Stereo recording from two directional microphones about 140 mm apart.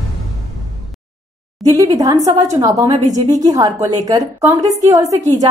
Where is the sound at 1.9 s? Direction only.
25° right (ahead or behind).